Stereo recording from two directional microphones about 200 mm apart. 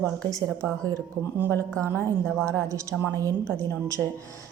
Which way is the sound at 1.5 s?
5° left (ahead or behind).